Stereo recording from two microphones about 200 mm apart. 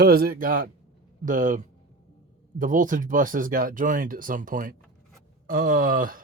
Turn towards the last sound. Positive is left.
turn(degrees=-45)  # may be behind; listen again after turning